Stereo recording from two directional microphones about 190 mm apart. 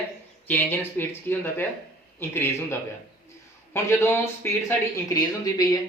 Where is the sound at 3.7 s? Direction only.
15° left (ahead or behind).